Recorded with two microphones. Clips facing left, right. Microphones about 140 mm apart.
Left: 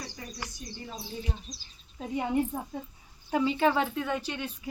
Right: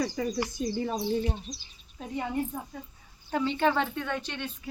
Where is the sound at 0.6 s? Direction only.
80° right.